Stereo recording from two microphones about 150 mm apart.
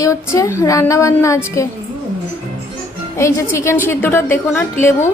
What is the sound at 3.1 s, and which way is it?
A woman's voice, 20° left (ahead or behind).